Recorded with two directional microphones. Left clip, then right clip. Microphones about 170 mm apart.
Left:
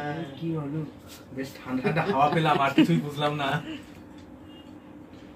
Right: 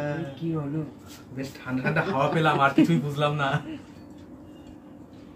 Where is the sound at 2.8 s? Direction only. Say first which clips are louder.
Even; 5° left (ahead or behind).